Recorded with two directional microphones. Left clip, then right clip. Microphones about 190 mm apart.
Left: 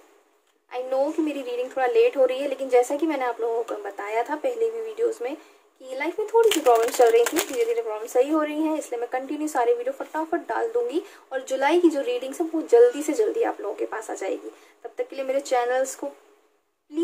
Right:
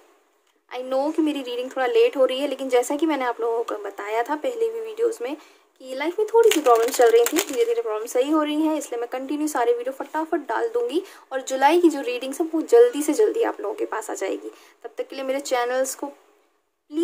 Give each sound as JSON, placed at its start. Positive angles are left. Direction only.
{"t": 0.7, "sound": "speech", "side_deg": -40}
{"t": 6.5, "sound": "speech", "side_deg": -20}
{"t": 7.0, "sound": "speech", "side_deg": -30}